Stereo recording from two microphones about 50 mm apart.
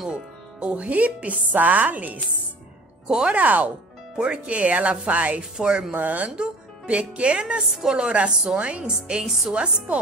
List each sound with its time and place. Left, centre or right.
0.1 s speech: right
3.3 s speech: right
5.4 s speech: centre
5.9 s speech: right
7.6 s a woman's voice: centre
7.9 s speech: right
9.2 s a woman's voice: centre
9.5 s speech: right